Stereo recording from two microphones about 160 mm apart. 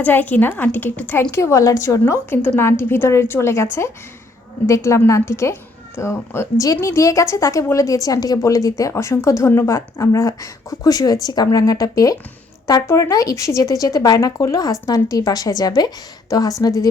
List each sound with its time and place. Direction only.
0.0 s a woman's voice: 10° left (ahead or behind)